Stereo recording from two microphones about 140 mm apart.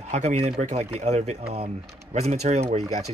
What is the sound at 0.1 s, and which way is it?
Speech, 55° right (ahead or behind).